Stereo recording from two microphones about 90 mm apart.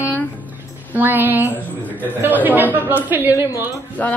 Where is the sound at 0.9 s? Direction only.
20° right (ahead or behind).